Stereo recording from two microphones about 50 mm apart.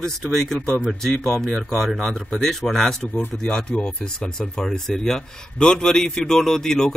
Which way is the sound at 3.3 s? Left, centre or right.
Centre.